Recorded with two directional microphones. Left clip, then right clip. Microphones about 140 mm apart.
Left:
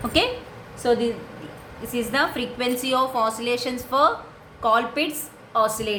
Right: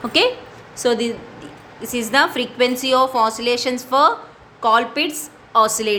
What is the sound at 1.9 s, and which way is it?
A woman's voice, 50° right (ahead or behind).